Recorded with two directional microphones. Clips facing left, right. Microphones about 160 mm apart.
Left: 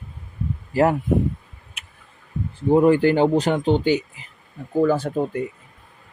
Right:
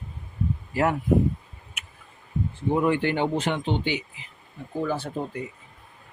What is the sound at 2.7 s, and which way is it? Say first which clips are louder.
Speech: left 8 dB; 35° left (ahead or behind).